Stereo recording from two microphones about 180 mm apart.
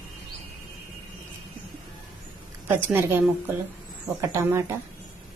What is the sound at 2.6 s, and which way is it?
A woman's voice, 10° right (ahead or behind).